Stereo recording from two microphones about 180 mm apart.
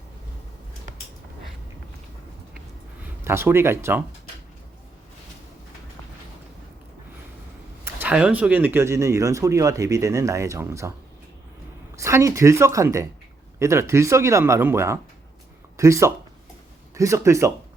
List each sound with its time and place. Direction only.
3.2 s speech: 15° right (ahead or behind)
7.9 s speech: 10° right (ahead or behind)
11.9 s speech: 15° right (ahead or behind)